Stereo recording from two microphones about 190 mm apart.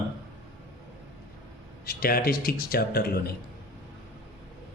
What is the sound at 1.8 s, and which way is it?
Speech, 50° left (ahead or behind).